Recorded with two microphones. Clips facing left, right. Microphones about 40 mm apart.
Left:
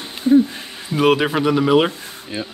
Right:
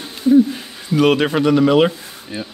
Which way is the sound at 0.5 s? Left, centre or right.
Centre.